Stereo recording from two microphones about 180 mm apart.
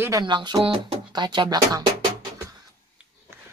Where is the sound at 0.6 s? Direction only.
25° right (ahead or behind).